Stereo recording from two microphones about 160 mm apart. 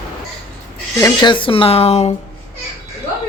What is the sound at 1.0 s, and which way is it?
Speech, 30° left (ahead or behind).